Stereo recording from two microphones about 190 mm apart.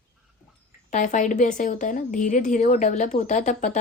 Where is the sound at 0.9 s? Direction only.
40° left (ahead or behind).